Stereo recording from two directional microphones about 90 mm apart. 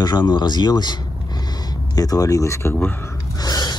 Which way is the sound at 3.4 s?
50° left (ahead or behind).